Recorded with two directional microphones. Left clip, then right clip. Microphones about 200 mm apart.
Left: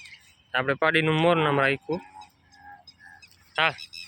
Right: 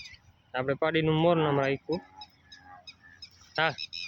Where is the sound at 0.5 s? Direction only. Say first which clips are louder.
Left 5 dB; centre (ahead or behind).